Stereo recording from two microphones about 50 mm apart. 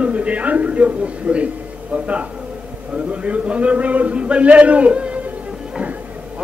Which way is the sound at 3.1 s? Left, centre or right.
Right.